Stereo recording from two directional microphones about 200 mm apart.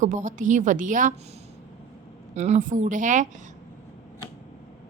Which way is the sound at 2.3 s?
35° right (ahead or behind).